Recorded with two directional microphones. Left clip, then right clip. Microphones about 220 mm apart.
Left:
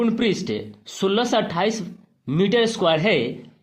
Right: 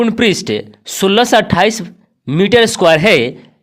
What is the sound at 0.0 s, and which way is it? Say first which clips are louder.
Speech: right 9 dB; 40° right (ahead or behind).